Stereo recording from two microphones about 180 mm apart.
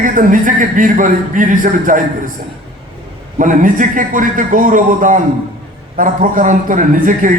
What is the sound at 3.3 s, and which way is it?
A man's voice, 45° right (ahead or behind).